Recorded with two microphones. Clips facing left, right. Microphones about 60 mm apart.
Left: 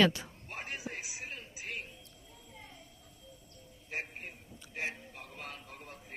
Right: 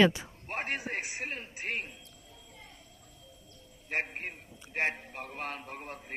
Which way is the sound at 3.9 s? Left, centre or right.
Right.